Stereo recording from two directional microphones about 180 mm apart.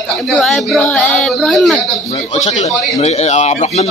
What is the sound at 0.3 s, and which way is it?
Speech, centre (ahead or behind).